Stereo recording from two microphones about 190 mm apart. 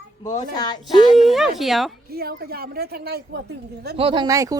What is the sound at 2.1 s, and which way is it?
Speech, 55° right (ahead or behind).